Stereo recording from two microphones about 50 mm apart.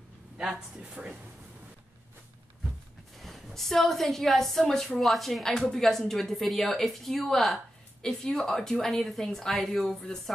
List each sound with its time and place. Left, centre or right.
0.8 s speech: centre
3.2 s a woman's voice: centre